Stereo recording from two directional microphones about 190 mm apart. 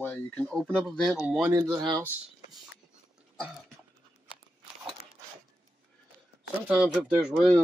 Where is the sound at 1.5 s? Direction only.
20° right (ahead or behind).